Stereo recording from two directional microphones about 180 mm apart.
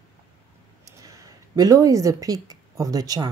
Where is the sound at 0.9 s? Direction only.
20° right (ahead or behind).